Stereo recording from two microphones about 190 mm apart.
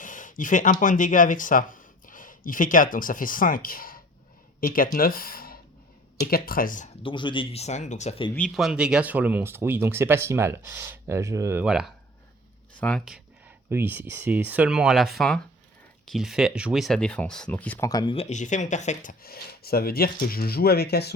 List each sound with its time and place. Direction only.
0.0 s speech: 45° left (ahead or behind)
7.0 s speech: 25° left (ahead or behind)
8.4 s speech: centre (ahead or behind); by 11.6 s 15° right (ahead or behind)
11.6 s speech: 5° right (ahead or behind)
13.7 s speech: 10° right (ahead or behind); by 19.1 s 40° left (ahead or behind)
19.2 s speech: 55° left (ahead or behind)